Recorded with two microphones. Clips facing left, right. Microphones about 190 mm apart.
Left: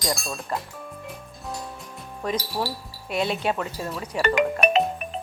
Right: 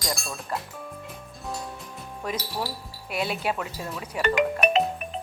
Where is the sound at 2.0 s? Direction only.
5° right (ahead or behind).